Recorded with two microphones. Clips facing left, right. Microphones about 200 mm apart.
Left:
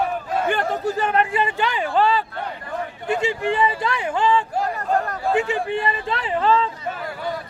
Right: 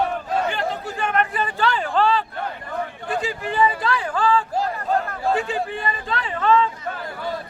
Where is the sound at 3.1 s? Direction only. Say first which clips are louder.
Left 6 dB; 25° left (ahead or behind).